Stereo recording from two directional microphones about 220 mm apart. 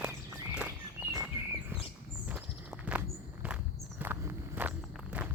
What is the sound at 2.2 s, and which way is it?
Walk, 5° right (ahead or behind).